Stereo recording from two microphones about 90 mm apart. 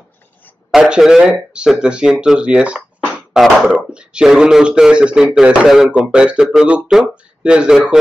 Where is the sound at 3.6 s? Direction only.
10° right (ahead or behind).